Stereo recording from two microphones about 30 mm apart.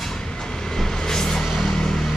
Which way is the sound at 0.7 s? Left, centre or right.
Centre.